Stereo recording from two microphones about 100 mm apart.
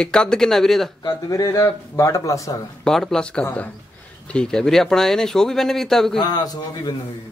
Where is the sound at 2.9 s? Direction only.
5° left (ahead or behind).